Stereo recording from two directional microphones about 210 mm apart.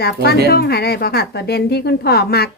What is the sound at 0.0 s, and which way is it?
A woman's voice, 50° left (ahead or behind).